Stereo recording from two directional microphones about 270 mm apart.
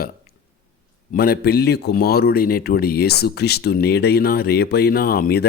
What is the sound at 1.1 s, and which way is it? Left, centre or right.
A man's voice, left.